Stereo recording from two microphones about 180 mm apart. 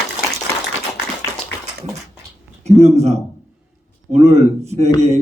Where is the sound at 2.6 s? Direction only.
40° right (ahead or behind).